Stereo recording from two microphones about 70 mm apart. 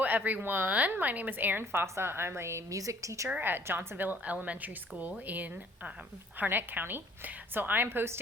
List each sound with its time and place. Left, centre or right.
0.0 s a woman's voice: right
3.2 s a woman's voice: right